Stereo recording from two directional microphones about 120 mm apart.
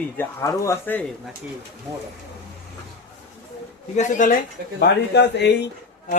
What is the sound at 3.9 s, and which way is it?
Speech, 90° left.